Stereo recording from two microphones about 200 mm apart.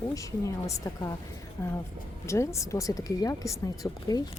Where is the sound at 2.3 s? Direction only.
15° left (ahead or behind).